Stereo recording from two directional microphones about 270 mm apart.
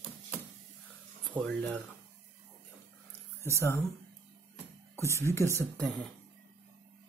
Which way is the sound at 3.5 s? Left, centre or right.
Centre.